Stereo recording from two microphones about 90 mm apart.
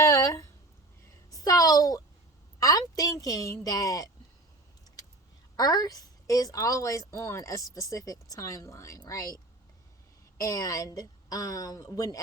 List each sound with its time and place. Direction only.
0.0 s a sound: 35° left (ahead or behind)
2.6 s speech: 40° left (ahead or behind)
5.5 s speech: 45° left (ahead or behind)
10.3 s speech: 40° left (ahead or behind)